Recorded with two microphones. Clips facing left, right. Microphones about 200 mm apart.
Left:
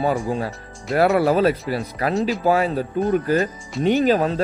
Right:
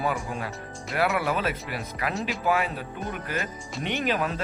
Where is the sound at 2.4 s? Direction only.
35° left (ahead or behind).